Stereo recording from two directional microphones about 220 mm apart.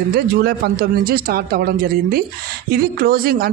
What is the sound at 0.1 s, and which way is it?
Speech, 45° right (ahead or behind).